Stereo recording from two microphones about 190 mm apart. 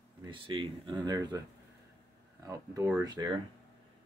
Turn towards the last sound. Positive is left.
turn(degrees=-20)  # may be behind; listen again after turning